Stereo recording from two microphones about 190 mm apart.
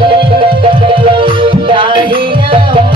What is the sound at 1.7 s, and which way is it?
Music, 25° right (ahead or behind).